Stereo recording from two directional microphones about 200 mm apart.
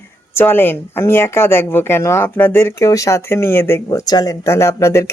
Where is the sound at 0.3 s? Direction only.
10° left (ahead or behind).